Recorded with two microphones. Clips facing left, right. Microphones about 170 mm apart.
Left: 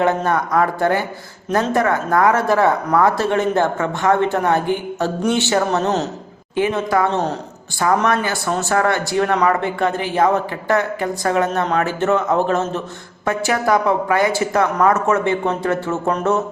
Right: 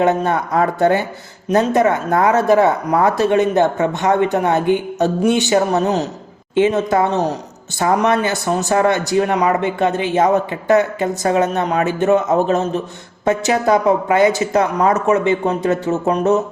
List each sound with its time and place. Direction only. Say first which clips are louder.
0.0 s speech: right 2 dB; 20° right (ahead or behind)